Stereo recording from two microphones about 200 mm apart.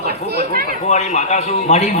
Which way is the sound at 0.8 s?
35° left (ahead or behind).